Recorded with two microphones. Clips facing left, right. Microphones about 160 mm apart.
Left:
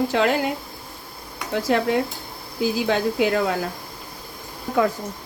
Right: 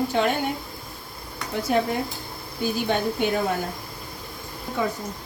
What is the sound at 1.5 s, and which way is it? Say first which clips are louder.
Speech: left 3 dB; 90° left.